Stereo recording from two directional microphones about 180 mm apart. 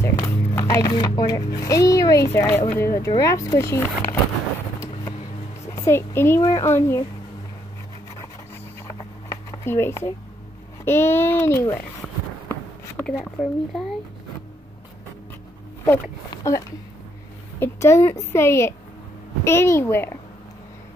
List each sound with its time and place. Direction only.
0.0 s music: 15° left (ahead or behind)
1.6 s speech: 20° left (ahead or behind)
5.7 s speech: 15° left (ahead or behind)
8.8 s a sound: 15° left (ahead or behind)
10.9 s speech: 15° left (ahead or behind)
13.0 s speech: centre (ahead or behind)
15.8 s speech: 15° left (ahead or behind)